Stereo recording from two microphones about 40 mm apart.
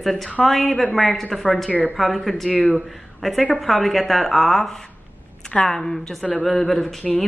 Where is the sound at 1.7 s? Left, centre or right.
Left.